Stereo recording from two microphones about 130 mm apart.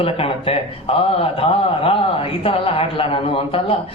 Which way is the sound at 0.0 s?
45° left (ahead or behind).